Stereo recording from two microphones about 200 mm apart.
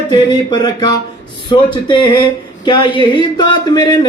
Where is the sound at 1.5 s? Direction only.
25° left (ahead or behind).